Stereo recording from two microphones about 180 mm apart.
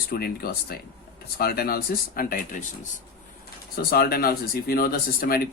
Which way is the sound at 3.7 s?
60° left (ahead or behind).